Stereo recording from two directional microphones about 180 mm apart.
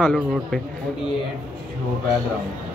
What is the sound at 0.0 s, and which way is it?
Speech, 5° left (ahead or behind).